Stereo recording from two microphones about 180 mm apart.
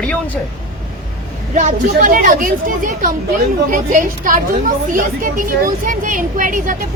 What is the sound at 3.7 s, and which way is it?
A woman's voice, 45° right (ahead or behind).